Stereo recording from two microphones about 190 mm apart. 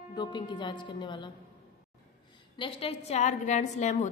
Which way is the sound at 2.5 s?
30° left (ahead or behind).